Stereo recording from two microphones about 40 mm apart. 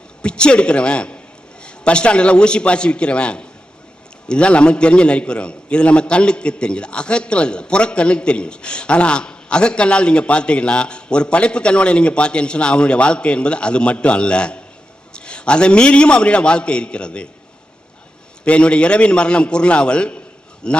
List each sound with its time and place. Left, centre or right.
0.2 s a man's voice: left
18.4 s a man's voice: left